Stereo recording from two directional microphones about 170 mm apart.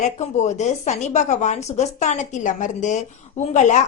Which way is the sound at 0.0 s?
40° left (ahead or behind).